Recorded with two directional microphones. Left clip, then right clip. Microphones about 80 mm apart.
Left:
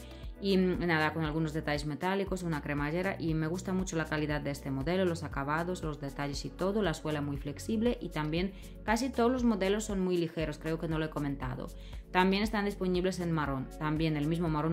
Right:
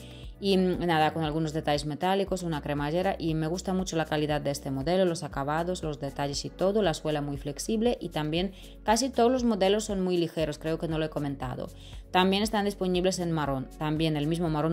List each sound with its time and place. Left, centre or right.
0.7 s speech: right